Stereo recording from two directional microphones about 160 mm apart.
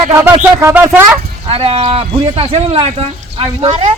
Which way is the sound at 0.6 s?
15° right (ahead or behind).